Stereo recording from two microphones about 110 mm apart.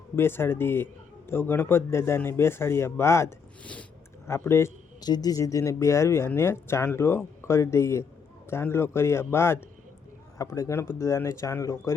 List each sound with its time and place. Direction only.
0.2 s speech: 20° left (ahead or behind)
3.6 s a sound: 10° left (ahead or behind)
4.3 s speech: 25° left (ahead or behind)
4.9 s speech: 40° left (ahead or behind)